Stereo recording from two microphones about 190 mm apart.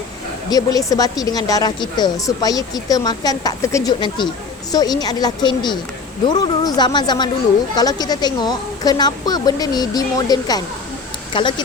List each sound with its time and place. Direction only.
0.5 s speech: 20° left (ahead or behind)